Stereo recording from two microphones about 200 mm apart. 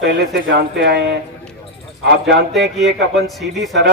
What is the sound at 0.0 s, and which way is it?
A man's voice, 60° right (ahead or behind).